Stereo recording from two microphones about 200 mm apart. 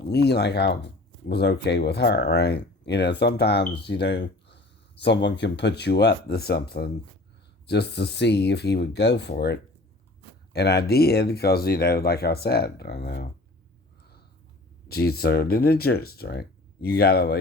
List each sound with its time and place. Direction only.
0.1 s speech: 55° left (ahead or behind)
14.8 s speech: 50° left (ahead or behind)